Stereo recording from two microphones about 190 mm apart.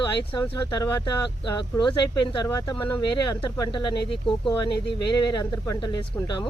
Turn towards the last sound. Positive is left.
turn(degrees=15)  # may be behind; listen again after turning